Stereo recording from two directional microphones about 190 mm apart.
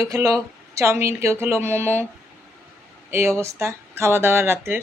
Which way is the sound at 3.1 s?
15° right (ahead or behind).